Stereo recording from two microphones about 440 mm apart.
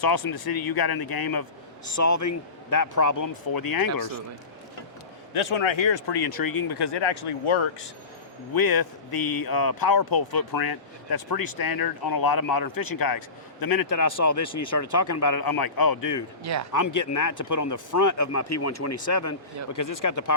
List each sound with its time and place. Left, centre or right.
0.0 s speech: left
2.0 s speech: left
5.3 s speech: left
8.5 s speech: left
16.4 s speech: right
16.7 s speech: left